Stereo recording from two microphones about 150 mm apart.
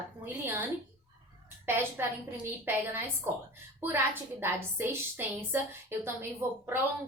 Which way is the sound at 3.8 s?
15° right (ahead or behind).